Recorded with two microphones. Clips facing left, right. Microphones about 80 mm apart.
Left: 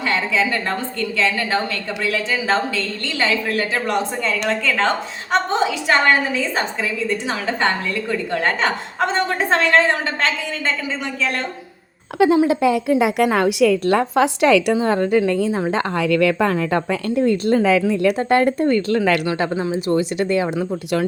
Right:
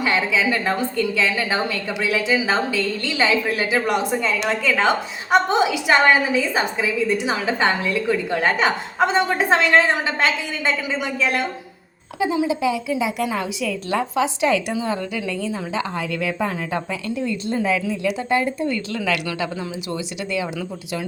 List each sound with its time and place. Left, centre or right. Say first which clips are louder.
0.0 s a woman's voice: even; centre
12.2 s a woman's voice: left 6 dB; left
14.7 s a woman's voice: left 8 dB; left